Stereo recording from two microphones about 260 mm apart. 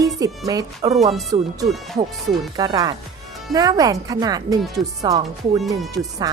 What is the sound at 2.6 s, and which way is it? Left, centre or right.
A woman's voice, centre.